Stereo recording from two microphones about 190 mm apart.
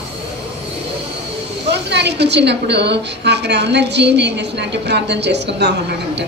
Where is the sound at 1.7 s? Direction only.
65° right (ahead or behind).